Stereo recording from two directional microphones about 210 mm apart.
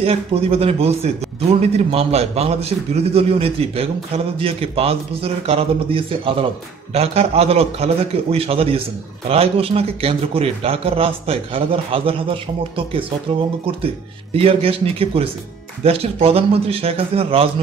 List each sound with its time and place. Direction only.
0.0 s a man's voice: 30° right (ahead or behind)